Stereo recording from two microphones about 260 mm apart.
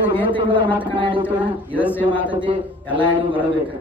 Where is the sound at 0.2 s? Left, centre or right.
Centre.